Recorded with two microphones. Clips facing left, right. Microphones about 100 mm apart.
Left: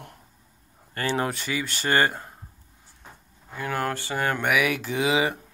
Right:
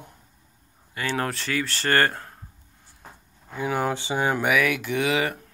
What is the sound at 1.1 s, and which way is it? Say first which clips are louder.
Speech: right 4 dB; 5° left (ahead or behind).